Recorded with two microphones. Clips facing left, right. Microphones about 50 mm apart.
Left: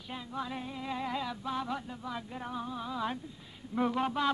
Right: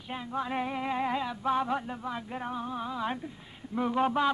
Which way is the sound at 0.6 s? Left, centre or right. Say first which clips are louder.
Right 8 dB; right.